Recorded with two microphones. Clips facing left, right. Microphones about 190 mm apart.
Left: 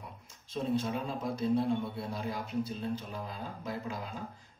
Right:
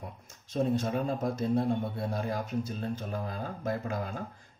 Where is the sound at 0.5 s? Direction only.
45° right (ahead or behind).